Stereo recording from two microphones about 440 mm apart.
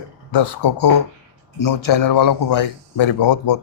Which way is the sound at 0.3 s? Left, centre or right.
Left.